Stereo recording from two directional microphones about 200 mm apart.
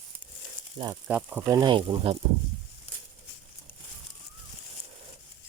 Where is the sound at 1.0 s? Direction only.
10° right (ahead or behind); by 2.1 s 25° right (ahead or behind).